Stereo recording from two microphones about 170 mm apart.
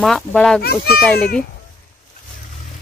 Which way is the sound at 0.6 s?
65° left (ahead or behind).